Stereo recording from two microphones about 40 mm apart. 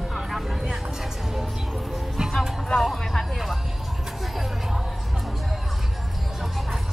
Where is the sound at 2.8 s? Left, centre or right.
Centre.